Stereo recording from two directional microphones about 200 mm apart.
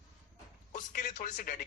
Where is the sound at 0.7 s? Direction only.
40° left (ahead or behind).